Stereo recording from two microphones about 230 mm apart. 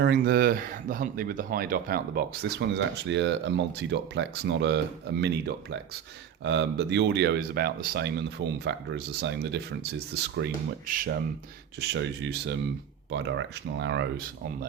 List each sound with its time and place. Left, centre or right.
0.0 s speech: right
11.8 s speech: right